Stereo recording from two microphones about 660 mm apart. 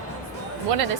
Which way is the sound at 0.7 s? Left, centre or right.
Right.